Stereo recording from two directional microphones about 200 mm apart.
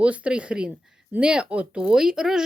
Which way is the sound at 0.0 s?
5° right (ahead or behind).